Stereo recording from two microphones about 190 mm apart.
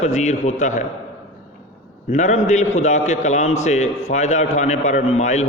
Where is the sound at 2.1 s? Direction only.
40° left (ahead or behind).